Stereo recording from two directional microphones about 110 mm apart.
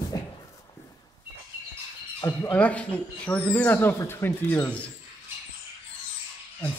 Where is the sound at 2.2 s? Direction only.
30° left (ahead or behind).